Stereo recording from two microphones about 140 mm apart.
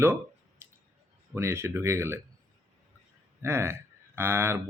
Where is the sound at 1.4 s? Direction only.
20° right (ahead or behind).